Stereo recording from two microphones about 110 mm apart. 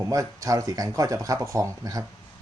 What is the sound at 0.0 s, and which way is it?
Speech, 30° right (ahead or behind).